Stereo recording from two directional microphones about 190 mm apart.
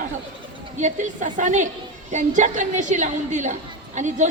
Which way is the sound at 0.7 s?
40° right (ahead or behind).